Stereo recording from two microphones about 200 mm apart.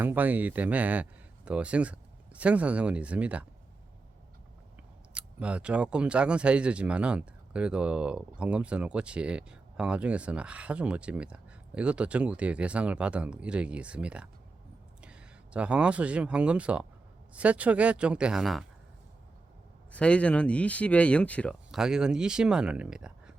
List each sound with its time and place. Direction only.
0.0 s speech: 10° right (ahead or behind)
5.1 s speech: 5° right (ahead or behind)
19.9 s speech: 5° left (ahead or behind)